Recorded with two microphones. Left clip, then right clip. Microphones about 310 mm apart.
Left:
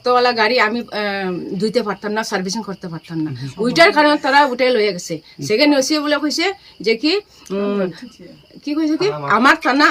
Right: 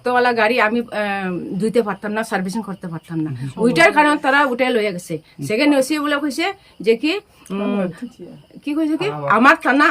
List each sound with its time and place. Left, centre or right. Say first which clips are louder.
0.0 s a woman's voice: left 1 dB; centre